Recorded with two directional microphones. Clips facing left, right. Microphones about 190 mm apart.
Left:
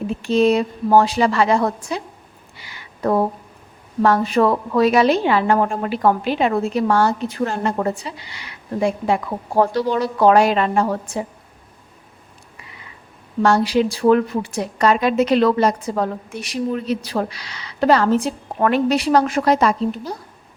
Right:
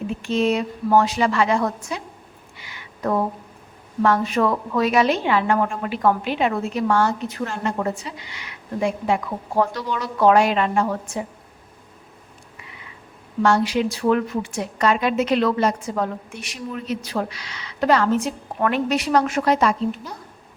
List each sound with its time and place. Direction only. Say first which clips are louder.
0.1 s a woman's voice: left 5 dB; 35° left (ahead or behind)
2.6 s a sound: left 4 dB; 35° left (ahead or behind)
4.0 s a woman's voice: left 3 dB; 35° left (ahead or behind)
13.4 s a woman's voice: left 3 dB; 35° left (ahead or behind)